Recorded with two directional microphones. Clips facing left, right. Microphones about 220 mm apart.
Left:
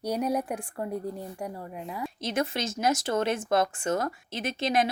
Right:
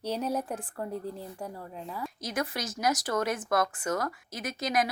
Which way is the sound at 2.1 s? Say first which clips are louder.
Left 4 dB; 25° left (ahead or behind).